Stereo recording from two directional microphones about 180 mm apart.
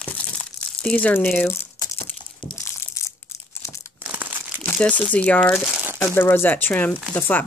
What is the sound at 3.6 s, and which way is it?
Crumpling, 15° left (ahead or behind).